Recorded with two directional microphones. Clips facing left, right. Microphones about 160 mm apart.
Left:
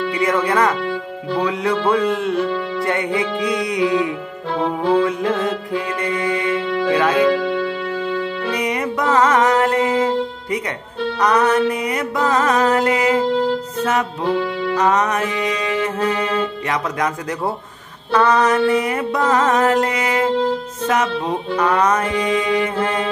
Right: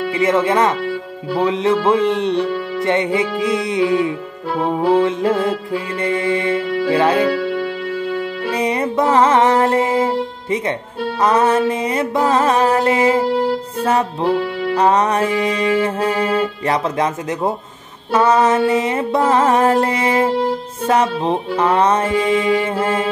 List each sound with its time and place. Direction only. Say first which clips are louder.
0.1 s music: right 4 dB; 25° right (ahead or behind)